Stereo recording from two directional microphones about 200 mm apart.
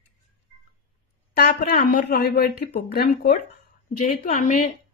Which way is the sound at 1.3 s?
50° left (ahead or behind).